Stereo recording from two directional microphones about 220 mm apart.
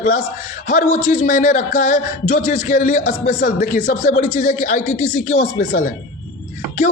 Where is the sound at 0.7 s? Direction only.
35° left (ahead or behind).